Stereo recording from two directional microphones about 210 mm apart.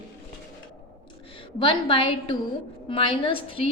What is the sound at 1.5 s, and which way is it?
A woman's voice, 25° left (ahead or behind).